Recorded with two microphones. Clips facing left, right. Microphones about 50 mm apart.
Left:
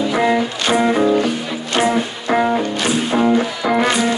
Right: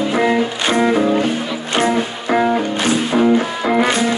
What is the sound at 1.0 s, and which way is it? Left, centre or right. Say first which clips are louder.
Music: even; right.